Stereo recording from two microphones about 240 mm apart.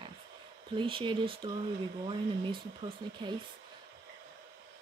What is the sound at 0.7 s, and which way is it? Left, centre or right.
Speech, right.